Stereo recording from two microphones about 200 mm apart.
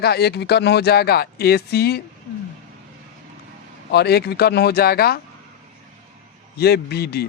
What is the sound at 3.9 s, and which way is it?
Speech, 55° left (ahead or behind).